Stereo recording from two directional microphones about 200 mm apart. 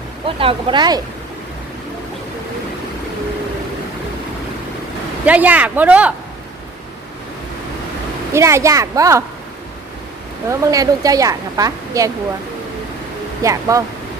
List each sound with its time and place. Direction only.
0.3 s speech: 25° right (ahead or behind)
5.2 s a woman's voice: 10° right (ahead or behind)
8.3 s a woman's voice: 15° right (ahead or behind)
10.5 s a woman's voice: 15° right (ahead or behind)
13.4 s a woman's voice: 15° right (ahead or behind)